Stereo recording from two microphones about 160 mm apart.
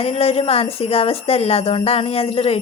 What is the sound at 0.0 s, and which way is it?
Speech, 40° left (ahead or behind).